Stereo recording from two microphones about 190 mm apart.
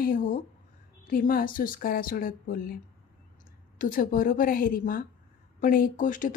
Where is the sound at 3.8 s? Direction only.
45° left (ahead or behind).